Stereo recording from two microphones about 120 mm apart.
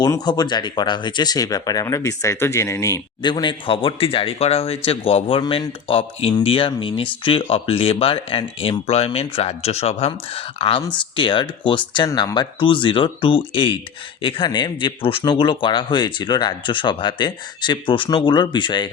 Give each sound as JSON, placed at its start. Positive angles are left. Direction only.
{"t": 0.0, "sound": "speech", "side_deg": 35}
{"t": 3.2, "sound": "speech", "side_deg": 40}